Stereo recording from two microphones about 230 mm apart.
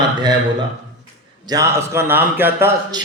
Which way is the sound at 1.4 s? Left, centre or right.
Centre.